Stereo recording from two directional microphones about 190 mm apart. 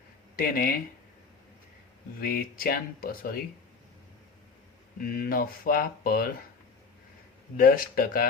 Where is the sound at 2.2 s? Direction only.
50° left (ahead or behind).